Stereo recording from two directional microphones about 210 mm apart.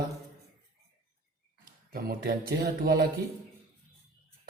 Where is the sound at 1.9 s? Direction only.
45° right (ahead or behind).